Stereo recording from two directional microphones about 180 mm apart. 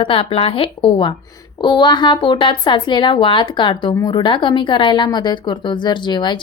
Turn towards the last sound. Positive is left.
turn(degrees=25)  # may be behind; listen again after turning